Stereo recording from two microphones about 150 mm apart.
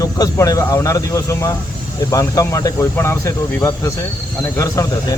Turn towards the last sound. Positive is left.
turn(degrees=20)  # may be behind; listen again after turning